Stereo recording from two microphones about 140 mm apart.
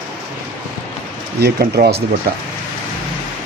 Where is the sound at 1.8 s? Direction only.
90° right.